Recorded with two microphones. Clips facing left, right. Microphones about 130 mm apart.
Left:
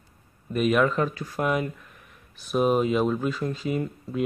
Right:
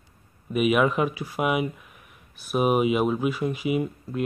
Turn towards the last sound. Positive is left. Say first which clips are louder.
# right 2 dB
turn(degrees=-10)  # may be behind; listen again after turning